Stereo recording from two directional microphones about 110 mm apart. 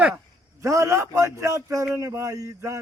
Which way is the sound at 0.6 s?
25° right (ahead or behind).